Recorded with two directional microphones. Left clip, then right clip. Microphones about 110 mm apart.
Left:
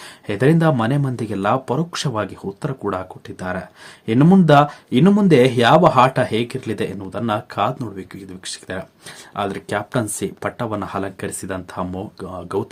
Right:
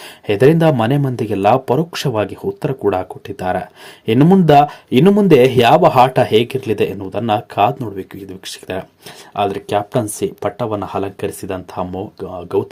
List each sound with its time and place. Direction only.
0.3 s speech: 25° right (ahead or behind); by 12.6 s 5° right (ahead or behind)